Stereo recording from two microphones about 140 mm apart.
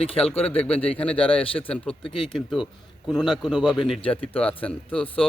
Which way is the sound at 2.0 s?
35° left (ahead or behind).